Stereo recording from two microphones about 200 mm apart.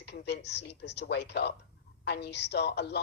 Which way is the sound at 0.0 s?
55° left (ahead or behind).